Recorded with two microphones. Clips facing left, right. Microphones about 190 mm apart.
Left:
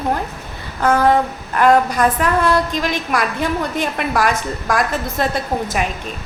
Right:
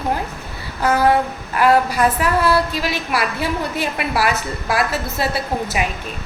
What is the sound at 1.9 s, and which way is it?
A woman's voice, 5° right (ahead or behind).